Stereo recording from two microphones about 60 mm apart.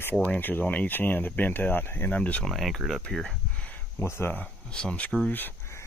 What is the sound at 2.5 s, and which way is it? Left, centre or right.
Speech, centre.